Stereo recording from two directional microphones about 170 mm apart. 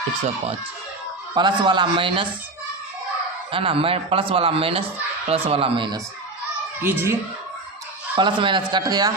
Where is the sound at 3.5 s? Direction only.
30° right (ahead or behind).